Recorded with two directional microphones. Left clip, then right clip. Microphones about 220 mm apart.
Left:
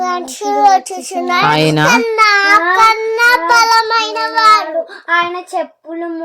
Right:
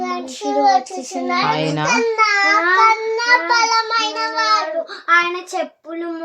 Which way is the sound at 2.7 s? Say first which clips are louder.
Left 4 dB; 35° left (ahead or behind).